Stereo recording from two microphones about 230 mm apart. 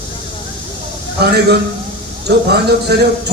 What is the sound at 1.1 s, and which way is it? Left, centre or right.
A man's voice, right.